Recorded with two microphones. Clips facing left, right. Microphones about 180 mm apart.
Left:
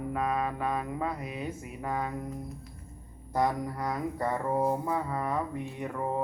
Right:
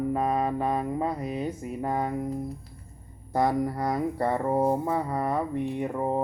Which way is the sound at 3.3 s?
30° right (ahead or behind).